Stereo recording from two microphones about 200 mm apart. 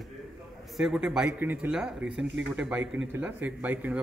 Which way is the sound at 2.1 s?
60° right (ahead or behind).